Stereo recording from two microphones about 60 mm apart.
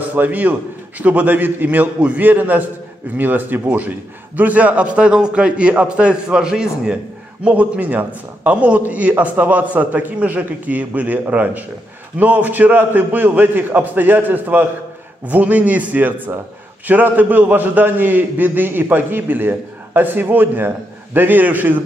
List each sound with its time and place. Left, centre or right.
0.1 s a man's voice: right; by 7.0 s centre
7.4 s a man's voice: right